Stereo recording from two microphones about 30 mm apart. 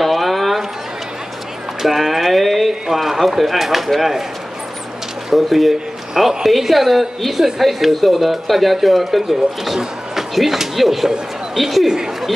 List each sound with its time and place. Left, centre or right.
0.0 s a sound: centre
1.8 s speech: centre
5.3 s speech: centre
11.9 s speech: centre